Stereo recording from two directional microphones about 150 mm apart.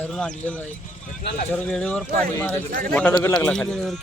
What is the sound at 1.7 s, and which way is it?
Speech, 5° left (ahead or behind).